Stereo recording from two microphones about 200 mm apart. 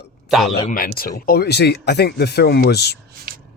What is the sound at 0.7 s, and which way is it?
Speech, 45° left (ahead or behind).